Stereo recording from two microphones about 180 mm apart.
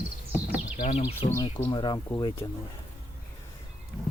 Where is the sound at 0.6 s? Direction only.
40° left (ahead or behind); by 2.4 s 15° left (ahead or behind).